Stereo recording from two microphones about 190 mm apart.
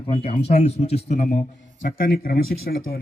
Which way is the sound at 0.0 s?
30° left (ahead or behind).